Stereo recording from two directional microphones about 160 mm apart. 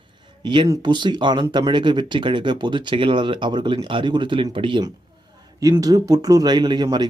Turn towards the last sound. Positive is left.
turn(degrees=-25)  # may be behind; listen again after turning